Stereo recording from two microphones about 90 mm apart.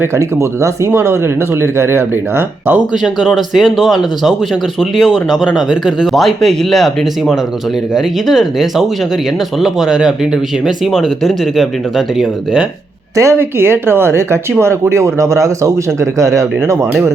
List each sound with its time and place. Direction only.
0.0 s speech: 35° right (ahead or behind)
3.0 s speech: 5° right (ahead or behind)
13.1 s speech: 30° right (ahead or behind)